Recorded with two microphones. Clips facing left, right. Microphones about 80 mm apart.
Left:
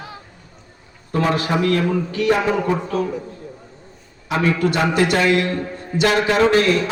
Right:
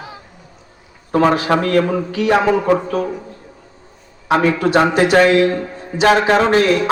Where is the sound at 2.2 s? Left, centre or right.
Right.